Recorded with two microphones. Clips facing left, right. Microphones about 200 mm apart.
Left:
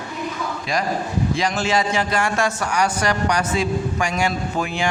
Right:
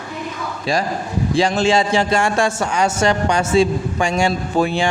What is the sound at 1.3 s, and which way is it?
Speech, 30° right (ahead or behind).